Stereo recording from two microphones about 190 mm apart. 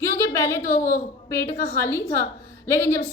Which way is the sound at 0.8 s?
45° left (ahead or behind).